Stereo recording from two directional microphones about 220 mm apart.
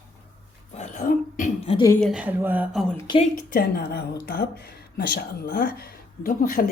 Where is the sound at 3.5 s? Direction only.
45° left (ahead or behind).